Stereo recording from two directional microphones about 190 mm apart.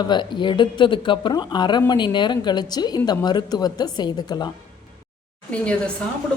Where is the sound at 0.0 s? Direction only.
25° left (ahead or behind).